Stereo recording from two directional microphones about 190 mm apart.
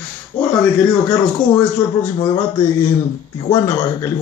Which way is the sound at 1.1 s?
5° left (ahead or behind).